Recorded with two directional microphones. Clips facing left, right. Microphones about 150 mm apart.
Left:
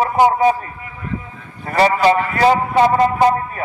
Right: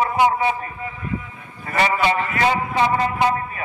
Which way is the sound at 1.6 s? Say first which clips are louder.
Left 6 dB; 35° left (ahead or behind).